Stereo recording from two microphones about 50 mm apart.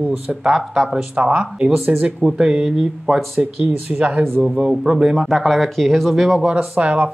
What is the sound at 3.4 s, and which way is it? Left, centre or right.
Speech, right.